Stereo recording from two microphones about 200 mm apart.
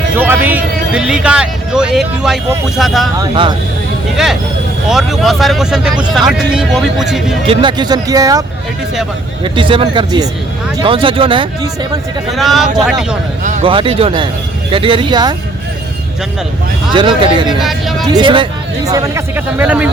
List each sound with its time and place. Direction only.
0.2 s a sound: 10° right (ahead or behind)
2.7 s speech: centre (ahead or behind)
3.2 s speech: 25° right (ahead or behind)
4.9 s speech: centre (ahead or behind)
7.4 s speech: 25° right (ahead or behind)
12.3 s speech: centre (ahead or behind)
13.4 s speech: 40° right (ahead or behind)
13.7 s speech: 25° right (ahead or behind)
16.9 s speech: 25° right (ahead or behind)
17.6 s speech: centre (ahead or behind)
18.0 s a man's voice: 20° right (ahead or behind)